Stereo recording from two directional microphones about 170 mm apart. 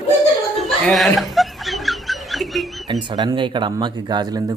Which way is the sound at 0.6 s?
Centre (ahead or behind).